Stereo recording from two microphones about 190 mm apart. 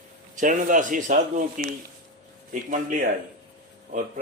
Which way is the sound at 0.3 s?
40° right (ahead or behind).